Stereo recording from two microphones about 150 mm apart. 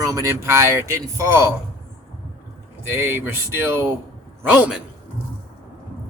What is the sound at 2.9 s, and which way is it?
Speech, 15° right (ahead or behind).